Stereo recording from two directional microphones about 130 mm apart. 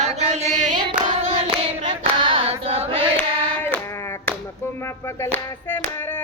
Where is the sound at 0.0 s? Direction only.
60° right (ahead or behind).